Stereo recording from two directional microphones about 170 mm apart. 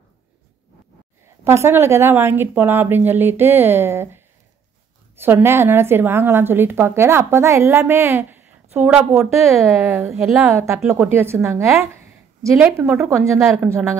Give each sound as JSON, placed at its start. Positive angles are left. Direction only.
{"t": 1.4, "sound": "a woman's voice", "side_deg": -15}
{"t": 9.5, "sound": "a woman's voice", "side_deg": 0}
{"t": 9.8, "sound": "a woman's voice", "side_deg": -15}